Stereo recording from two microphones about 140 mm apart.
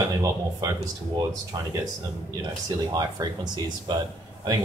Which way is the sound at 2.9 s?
30° right (ahead or behind).